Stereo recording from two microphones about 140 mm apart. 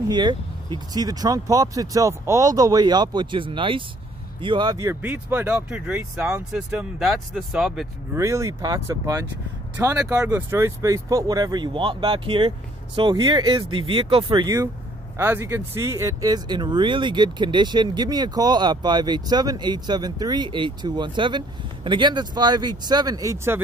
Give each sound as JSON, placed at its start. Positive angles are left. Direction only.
{"t": 0.1, "sound": "speech", "side_deg": -30}
{"t": 5.0, "sound": "speech", "side_deg": -10}
{"t": 8.1, "sound": "speech", "side_deg": -20}